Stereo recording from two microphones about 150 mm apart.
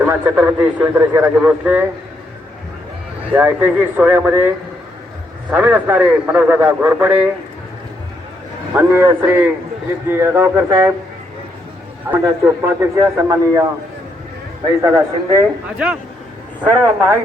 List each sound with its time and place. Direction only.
0.0 s a man's voice: 10° right (ahead or behind)
3.3 s a man's voice: 15° right (ahead or behind)
8.7 s a man's voice: 15° right (ahead or behind)
12.0 s a man's voice: 15° right (ahead or behind)
14.8 s a man's voice: 20° right (ahead or behind)
15.8 s a man's voice: 10° right (ahead or behind)